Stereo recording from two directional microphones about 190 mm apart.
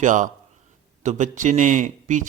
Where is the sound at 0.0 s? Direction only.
40° right (ahead or behind).